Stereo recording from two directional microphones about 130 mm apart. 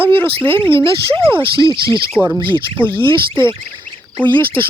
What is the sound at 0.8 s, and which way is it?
Speech, 40° right (ahead or behind).